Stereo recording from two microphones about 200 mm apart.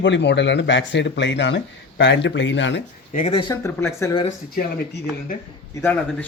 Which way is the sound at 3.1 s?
25° left (ahead or behind).